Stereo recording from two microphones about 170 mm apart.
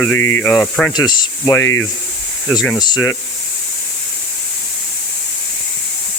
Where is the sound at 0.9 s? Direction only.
25° left (ahead or behind).